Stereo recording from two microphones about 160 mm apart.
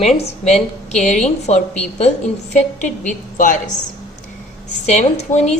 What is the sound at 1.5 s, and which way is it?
A woman's voice, 40° left (ahead or behind).